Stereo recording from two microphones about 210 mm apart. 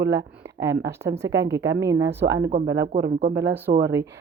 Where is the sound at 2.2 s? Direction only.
55° right (ahead or behind).